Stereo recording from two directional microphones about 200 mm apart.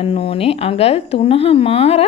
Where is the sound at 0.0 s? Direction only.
30° left (ahead or behind).